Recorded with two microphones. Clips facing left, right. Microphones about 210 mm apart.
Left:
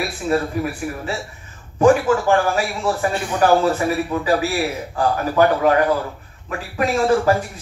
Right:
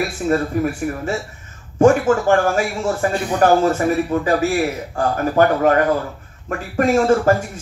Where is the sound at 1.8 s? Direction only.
45° right (ahead or behind).